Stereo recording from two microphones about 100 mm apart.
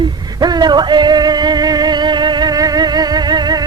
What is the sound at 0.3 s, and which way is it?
Music, 45° right (ahead or behind).